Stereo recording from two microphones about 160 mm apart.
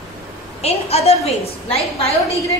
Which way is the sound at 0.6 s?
40° left (ahead or behind).